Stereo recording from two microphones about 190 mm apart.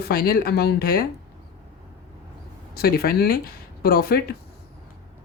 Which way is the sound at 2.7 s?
55° left (ahead or behind).